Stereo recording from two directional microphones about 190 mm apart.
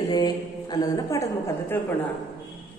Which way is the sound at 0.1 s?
20° left (ahead or behind).